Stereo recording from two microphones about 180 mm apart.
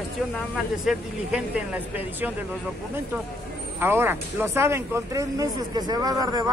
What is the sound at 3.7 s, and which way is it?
Speech, 10° right (ahead or behind).